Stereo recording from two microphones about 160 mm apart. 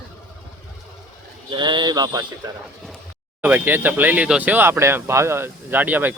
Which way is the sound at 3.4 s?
10° right (ahead or behind).